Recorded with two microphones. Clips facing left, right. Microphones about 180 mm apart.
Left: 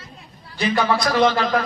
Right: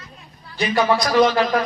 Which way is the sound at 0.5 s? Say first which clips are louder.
Right 1 dB; 30° left (ahead or behind).